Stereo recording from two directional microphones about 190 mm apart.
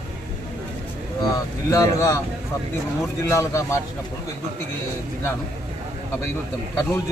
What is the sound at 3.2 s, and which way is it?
Speech, 15° left (ahead or behind).